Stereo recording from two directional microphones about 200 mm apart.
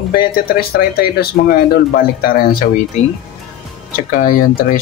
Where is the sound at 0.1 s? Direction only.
50° left (ahead or behind).